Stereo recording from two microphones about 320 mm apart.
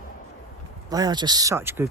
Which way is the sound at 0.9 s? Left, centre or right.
Centre.